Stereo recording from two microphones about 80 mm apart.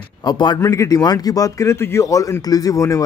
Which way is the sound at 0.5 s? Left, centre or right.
Left.